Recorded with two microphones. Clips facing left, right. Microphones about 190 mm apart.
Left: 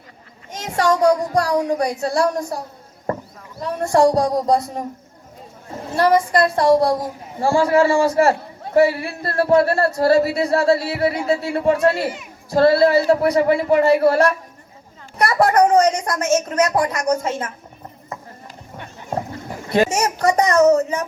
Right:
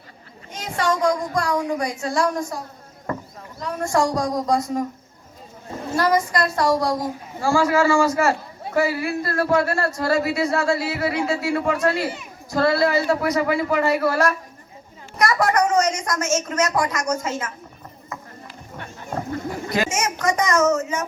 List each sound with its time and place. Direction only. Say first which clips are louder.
0.6 s speech: left 5 dB; 40° left (ahead or behind)
3.6 s speech: left 6 dB; 30° left (ahead or behind)
6.0 s speech: left 5 dB; 30° left (ahead or behind)
19.7 s speech: left 7 dB; 35° left (ahead or behind)